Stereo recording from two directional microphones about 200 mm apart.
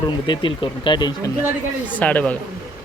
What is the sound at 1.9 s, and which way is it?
Speech, 5° left (ahead or behind).